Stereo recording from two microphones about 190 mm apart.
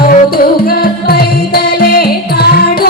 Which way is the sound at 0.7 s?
55° left (ahead or behind).